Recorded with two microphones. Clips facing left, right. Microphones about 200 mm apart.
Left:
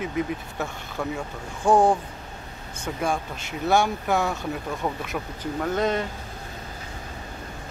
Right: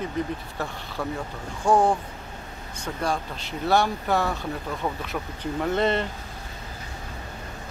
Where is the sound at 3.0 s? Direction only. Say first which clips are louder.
Left 1 dB; 10° left (ahead or behind).